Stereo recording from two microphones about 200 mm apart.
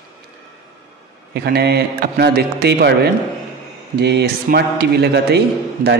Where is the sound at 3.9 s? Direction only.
55° right (ahead or behind).